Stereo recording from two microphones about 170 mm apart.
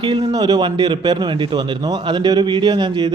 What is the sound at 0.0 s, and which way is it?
Speech, 25° right (ahead or behind).